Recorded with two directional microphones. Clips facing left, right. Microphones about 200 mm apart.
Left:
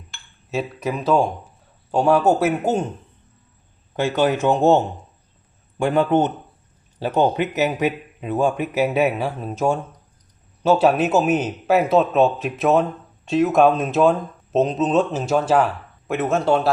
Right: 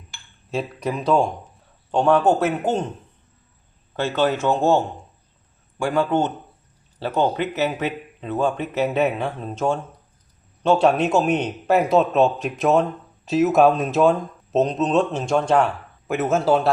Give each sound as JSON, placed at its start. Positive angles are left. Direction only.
{"t": 0.5, "sound": "speech", "side_deg": 5}
{"t": 3.9, "sound": "a man's voice", "side_deg": 15}